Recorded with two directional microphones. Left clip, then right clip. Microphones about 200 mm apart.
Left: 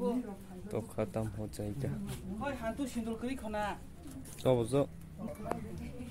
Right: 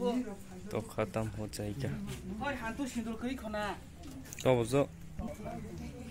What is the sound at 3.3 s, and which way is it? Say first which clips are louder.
Speech: even; 20° left (ahead or behind).